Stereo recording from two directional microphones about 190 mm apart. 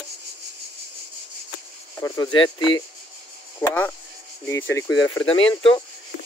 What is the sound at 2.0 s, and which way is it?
Speech, 20° left (ahead or behind).